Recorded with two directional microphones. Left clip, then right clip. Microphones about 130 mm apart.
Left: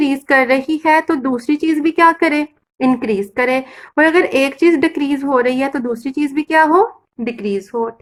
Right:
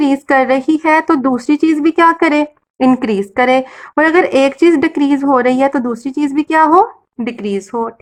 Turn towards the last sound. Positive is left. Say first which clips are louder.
# right 1 dB
turn(degrees=-25)  # may be behind; listen again after turning